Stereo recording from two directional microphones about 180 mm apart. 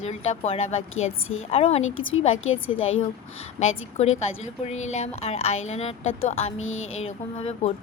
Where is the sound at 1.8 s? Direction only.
90° left.